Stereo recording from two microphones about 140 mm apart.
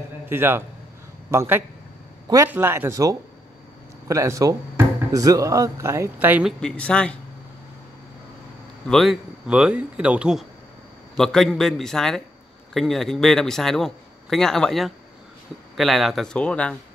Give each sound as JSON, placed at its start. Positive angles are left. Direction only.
{"t": 0.3, "sound": "speech", "side_deg": -15}
{"t": 6.6, "sound": "speech", "side_deg": 5}
{"t": 8.8, "sound": "a man's voice", "side_deg": 0}